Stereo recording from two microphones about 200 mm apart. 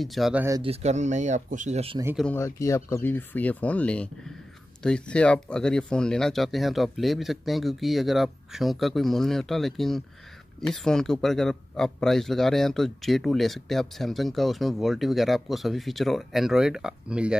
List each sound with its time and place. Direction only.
0.0 s speech: centre (ahead or behind)
0.6 s speech: 30° right (ahead or behind)
2.1 s speech: 10° left (ahead or behind)